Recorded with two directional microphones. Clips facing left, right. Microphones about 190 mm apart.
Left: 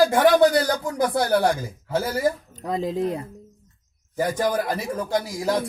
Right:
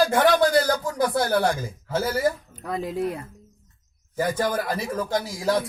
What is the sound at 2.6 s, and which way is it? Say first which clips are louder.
Speech: left 2 dB; 20° left (ahead or behind).